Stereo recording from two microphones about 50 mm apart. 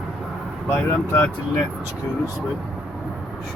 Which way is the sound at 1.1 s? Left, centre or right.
Left.